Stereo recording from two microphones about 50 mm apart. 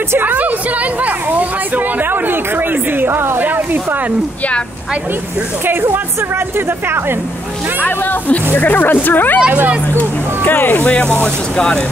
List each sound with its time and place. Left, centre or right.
0.2 s speech: right
3.0 s a sound: right
8.5 s speech: left
9.5 s speech: right
9.9 s speech: left
10.9 s speech: left
11.5 s speech: centre